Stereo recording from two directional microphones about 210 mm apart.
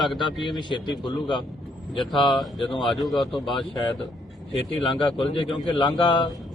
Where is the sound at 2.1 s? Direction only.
20° left (ahead or behind).